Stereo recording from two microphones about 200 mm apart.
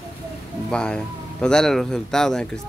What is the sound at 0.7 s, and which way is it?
Speech, 5° left (ahead or behind).